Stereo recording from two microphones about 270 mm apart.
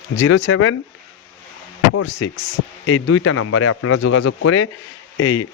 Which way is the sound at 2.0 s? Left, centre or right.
Left.